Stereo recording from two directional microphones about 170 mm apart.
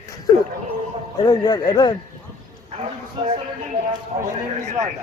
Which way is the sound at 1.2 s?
20° left (ahead or behind).